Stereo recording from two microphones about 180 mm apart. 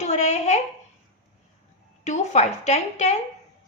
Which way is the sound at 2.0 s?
40° left (ahead or behind).